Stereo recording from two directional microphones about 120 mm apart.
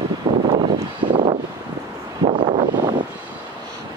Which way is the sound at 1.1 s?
45° right (ahead or behind).